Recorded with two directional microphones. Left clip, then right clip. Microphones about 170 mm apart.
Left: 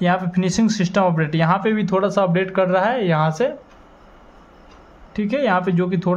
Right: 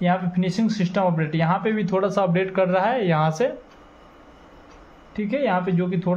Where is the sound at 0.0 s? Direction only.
35° left (ahead or behind).